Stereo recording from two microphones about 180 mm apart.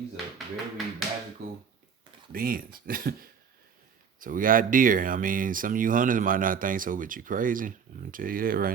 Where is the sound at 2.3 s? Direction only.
50° right (ahead or behind).